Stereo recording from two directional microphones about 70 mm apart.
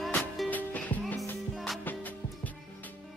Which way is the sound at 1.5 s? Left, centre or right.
Centre.